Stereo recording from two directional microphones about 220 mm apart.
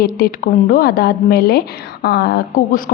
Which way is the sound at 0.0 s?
40° left (ahead or behind).